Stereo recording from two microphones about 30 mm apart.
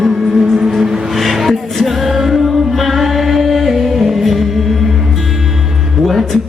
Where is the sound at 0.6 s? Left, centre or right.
Centre.